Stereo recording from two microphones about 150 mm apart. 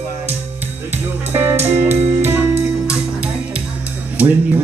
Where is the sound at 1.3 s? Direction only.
15° right (ahead or behind).